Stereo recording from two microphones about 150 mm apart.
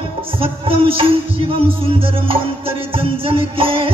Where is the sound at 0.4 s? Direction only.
40° right (ahead or behind).